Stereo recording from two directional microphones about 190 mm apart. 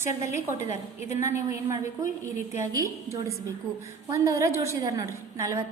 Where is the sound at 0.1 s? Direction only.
40° left (ahead or behind).